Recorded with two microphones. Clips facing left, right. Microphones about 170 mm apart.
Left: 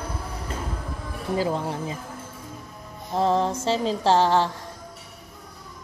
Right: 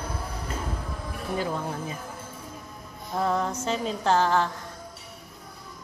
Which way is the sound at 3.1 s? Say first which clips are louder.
Left 4 dB; 30° left (ahead or behind).